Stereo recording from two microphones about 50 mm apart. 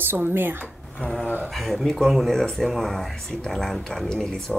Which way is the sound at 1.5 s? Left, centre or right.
Centre.